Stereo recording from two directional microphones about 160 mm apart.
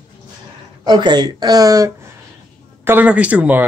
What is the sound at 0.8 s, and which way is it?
Speech, 25° right (ahead or behind).